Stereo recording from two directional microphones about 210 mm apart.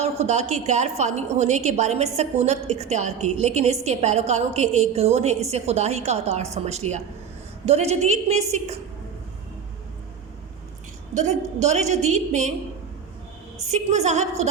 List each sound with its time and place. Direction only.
0.0 s a woman's voice: 30° right (ahead or behind)
11.6 s a woman's voice: 30° right (ahead or behind)
13.7 s a woman's voice: 30° right (ahead or behind)